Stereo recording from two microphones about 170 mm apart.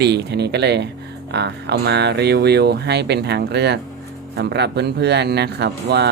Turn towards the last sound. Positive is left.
turn(degrees=-80)